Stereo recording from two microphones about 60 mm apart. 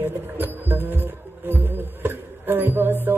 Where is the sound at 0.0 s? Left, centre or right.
Right.